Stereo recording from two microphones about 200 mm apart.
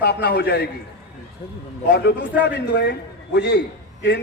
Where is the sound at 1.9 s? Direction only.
60° left (ahead or behind).